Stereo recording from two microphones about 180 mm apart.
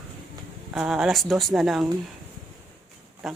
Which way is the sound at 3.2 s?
Centre (ahead or behind).